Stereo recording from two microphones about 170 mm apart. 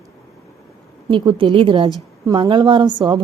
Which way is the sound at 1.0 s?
30° right (ahead or behind).